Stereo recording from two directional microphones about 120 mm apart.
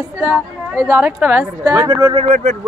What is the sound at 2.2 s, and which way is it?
Speech, 90° right.